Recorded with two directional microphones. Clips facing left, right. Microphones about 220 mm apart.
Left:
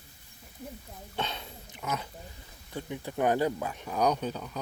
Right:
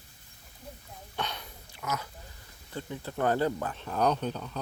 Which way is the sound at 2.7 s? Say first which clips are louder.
Left 1 dB; 15° left (ahead or behind).